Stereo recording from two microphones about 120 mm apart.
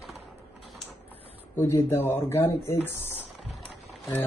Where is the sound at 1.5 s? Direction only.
20° left (ahead or behind).